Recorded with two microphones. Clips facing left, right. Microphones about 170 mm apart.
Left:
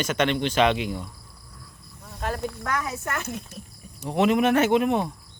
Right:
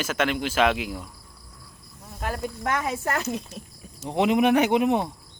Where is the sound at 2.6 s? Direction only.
25° right (ahead or behind).